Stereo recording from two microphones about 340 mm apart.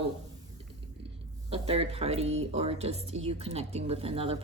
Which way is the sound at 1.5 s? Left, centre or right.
Centre.